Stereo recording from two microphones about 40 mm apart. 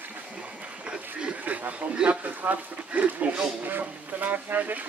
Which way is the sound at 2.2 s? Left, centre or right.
Right.